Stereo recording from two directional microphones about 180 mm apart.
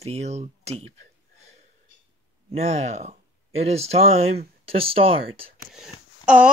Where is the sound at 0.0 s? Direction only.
35° right (ahead or behind).